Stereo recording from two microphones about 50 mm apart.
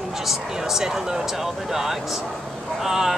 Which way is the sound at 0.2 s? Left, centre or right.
Centre.